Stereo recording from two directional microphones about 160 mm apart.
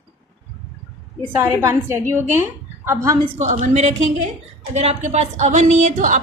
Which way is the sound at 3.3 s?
40° right (ahead or behind).